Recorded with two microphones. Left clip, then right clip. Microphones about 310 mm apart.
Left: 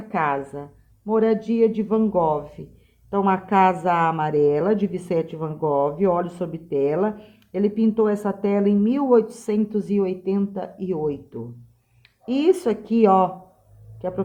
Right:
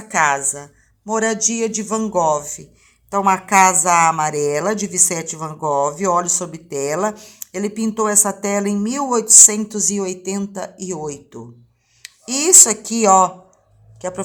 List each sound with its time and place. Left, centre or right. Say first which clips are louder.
0.1 s speech: right 6 dB; right